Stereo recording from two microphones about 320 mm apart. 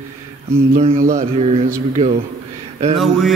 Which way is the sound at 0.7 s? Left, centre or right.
Right.